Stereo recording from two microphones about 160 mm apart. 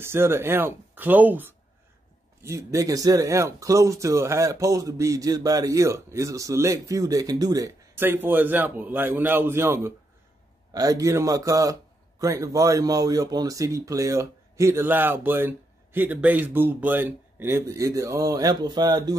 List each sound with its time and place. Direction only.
0.0 s a man's voice: 15° right (ahead or behind)